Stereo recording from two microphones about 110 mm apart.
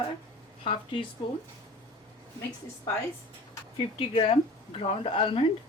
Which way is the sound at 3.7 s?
55° left (ahead or behind).